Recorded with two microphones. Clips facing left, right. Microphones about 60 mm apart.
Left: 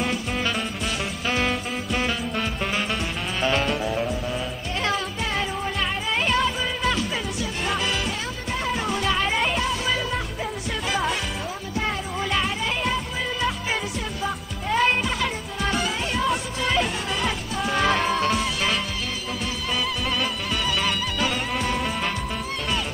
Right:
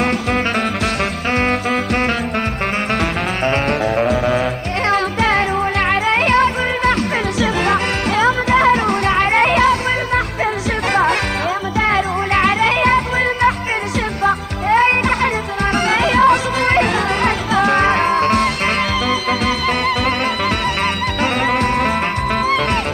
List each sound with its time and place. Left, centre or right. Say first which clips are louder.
3.4 s music: right 5 dB; right
4.0 s music: right 11 dB; right
4.8 s music: right 11 dB; right
7.6 s music: right 9 dB; right
11.8 s music: right 11 dB; right
15.9 s music: right 12 dB; right
17.8 s music: right 7 dB; right
21.2 s music: right 11 dB; right